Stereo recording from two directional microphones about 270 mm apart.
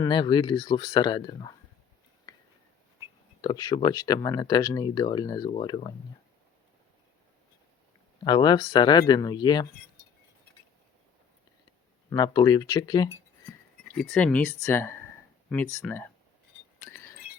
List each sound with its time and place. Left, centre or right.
0.0 s speech: centre
3.4 s speech: centre
8.2 s speech: centre
12.1 s speech: centre
13.8 s speech: centre
16.8 s a sound: centre